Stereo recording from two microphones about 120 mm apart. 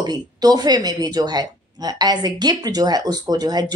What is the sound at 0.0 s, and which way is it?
Speech, 35° right (ahead or behind).